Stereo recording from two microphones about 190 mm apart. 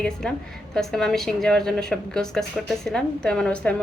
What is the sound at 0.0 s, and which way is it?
A woman's voice, 5° left (ahead or behind).